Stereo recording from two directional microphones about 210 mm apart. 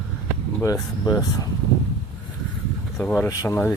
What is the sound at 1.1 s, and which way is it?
Speech, 15° left (ahead or behind).